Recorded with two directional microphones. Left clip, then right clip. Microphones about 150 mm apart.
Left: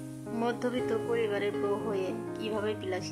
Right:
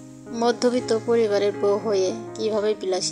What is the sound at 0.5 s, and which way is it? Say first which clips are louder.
Speech: right 11 dB; 35° right (ahead or behind).